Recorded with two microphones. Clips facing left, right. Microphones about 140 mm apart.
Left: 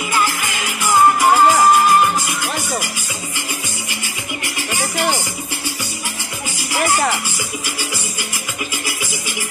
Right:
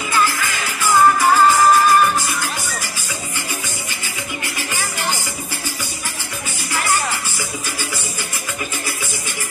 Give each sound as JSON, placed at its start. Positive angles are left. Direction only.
{"t": 0.1, "sound": "music", "side_deg": 20}